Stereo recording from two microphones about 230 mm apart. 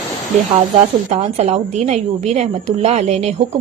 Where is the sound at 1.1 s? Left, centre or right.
Right.